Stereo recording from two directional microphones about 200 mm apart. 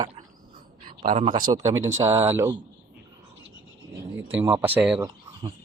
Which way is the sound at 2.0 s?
15° right (ahead or behind).